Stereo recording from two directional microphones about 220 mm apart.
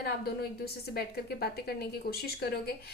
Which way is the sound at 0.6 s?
45° left (ahead or behind).